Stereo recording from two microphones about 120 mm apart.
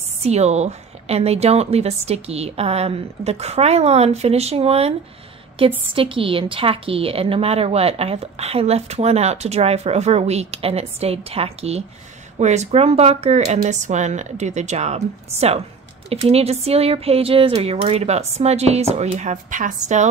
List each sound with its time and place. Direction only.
0.2 s a woman's voice: 65° right (ahead or behind)
12.4 s speech: 70° right (ahead or behind)
16.1 s a woman's voice: 55° right (ahead or behind); by 20.1 s 90° right